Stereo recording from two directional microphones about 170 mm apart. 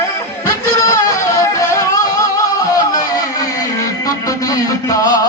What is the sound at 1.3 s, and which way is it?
Music, 20° left (ahead or behind).